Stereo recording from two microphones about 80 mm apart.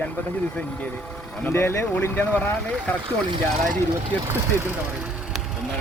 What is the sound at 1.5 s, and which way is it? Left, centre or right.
Speech, left.